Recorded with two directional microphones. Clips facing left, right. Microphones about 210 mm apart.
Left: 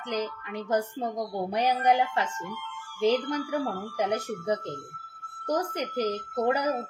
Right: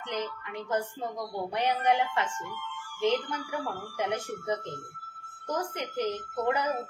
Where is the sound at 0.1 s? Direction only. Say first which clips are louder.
Left 3 dB; 35° left (ahead or behind).